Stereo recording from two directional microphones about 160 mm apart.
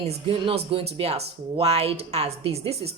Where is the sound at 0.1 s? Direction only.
40° right (ahead or behind).